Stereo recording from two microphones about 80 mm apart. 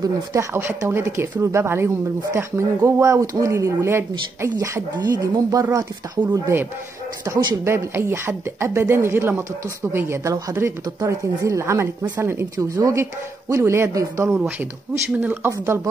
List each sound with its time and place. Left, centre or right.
0.0 s speech: right
4.9 s speech: right
6.5 s speech: right
12.5 s speech: right
14.6 s speech: right
15.6 s speech: right